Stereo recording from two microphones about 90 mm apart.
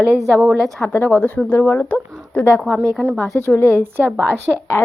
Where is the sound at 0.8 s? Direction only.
25° left (ahead or behind).